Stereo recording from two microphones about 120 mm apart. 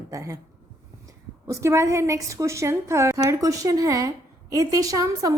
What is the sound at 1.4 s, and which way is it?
A woman's voice, 25° right (ahead or behind).